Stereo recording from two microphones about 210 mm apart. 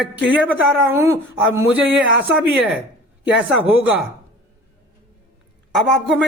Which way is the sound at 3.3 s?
5° right (ahead or behind).